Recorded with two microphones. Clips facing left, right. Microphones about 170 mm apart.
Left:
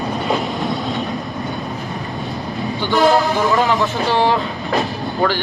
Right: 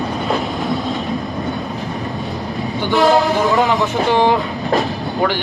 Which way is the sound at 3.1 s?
20° right (ahead or behind).